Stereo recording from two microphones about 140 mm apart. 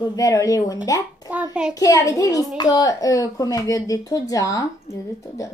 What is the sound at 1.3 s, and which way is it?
Child singing, 10° right (ahead or behind).